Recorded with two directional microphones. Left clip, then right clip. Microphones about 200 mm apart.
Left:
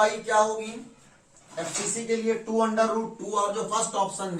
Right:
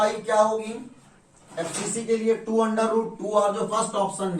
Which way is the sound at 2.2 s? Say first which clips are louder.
Right 2 dB; centre (ahead or behind).